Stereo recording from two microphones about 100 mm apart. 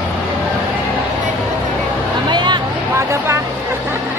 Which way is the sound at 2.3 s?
50° right (ahead or behind).